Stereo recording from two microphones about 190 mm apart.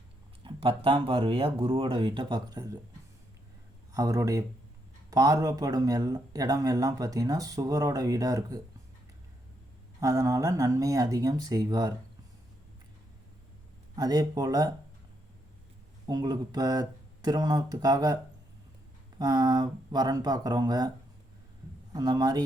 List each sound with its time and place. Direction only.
0.4 s a sound: 30° right (ahead or behind)
0.9 s speech: 25° right (ahead or behind)
3.9 s speech: 20° right (ahead or behind)
10.0 s speech: 15° right (ahead or behind)
13.9 s speech: 20° right (ahead or behind)
16.0 s speech: 20° right (ahead or behind)
19.2 s speech: 20° right (ahead or behind)
21.9 s speech: 20° right (ahead or behind)